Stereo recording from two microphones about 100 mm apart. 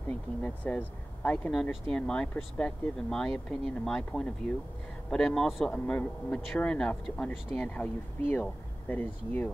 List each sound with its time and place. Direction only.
0.4 s speech: 15° left (ahead or behind)
1.5 s speech: 5° left (ahead or behind)
5.7 s speech: 15° left (ahead or behind)